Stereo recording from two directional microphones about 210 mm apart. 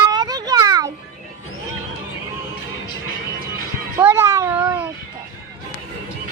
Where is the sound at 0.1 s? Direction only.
20° right (ahead or behind).